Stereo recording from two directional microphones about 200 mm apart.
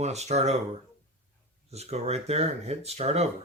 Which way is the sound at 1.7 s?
30° right (ahead or behind).